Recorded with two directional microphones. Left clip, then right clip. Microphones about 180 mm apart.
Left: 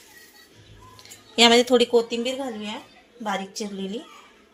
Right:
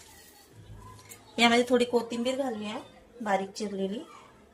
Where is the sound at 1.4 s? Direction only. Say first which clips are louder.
Left 7 dB; 50° left (ahead or behind).